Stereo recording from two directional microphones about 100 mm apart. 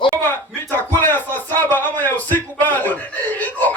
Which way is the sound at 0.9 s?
20° left (ahead or behind).